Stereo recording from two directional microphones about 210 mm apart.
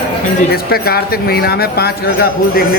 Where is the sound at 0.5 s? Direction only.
45° left (ahead or behind).